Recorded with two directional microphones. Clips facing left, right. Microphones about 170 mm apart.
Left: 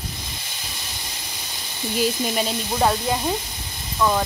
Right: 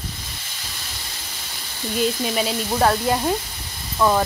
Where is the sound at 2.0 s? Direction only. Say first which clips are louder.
Right 1 dB; centre (ahead or behind).